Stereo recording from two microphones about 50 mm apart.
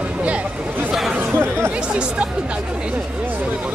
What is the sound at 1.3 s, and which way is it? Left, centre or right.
Speech, right.